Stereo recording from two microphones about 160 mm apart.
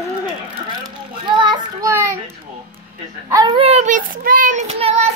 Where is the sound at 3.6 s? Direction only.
45° right (ahead or behind).